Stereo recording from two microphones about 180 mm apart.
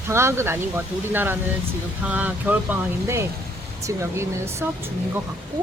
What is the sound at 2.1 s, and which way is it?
Speech, 10° right (ahead or behind).